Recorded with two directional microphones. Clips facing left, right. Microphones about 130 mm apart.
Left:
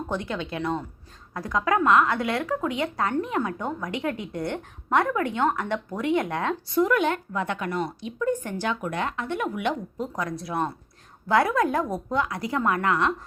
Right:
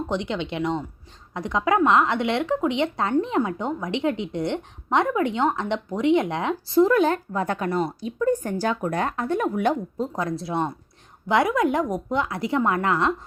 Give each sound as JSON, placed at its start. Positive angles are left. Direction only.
{"t": 0.1, "sound": "speech", "side_deg": -20}